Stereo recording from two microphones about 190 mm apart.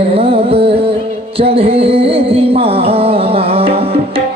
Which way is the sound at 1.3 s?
30° right (ahead or behind).